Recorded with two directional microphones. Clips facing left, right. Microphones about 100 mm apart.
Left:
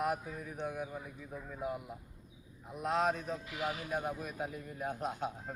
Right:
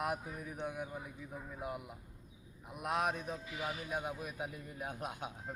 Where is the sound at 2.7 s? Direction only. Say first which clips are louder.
Left 3 dB; 15° right (ahead or behind).